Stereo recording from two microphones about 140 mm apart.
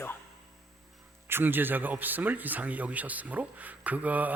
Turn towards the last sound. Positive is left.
turn(degrees=-10)  # may be behind; listen again after turning